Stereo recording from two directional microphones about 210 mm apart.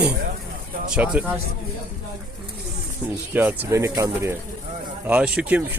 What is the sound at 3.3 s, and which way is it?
Speech, 10° right (ahead or behind).